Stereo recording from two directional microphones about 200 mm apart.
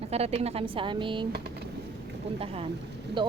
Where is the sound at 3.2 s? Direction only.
25° right (ahead or behind).